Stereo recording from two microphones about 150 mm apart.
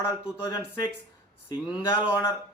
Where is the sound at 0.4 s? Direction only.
25° left (ahead or behind).